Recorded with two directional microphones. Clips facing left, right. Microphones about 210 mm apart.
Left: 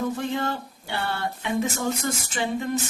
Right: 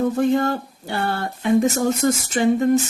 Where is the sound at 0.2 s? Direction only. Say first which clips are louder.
Right 9 dB; 45° right (ahead or behind).